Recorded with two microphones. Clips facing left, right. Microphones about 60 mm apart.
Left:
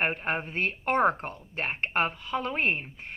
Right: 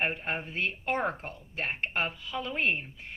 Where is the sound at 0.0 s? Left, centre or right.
Left.